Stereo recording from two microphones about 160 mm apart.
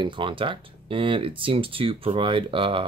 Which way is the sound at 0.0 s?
30° right (ahead or behind).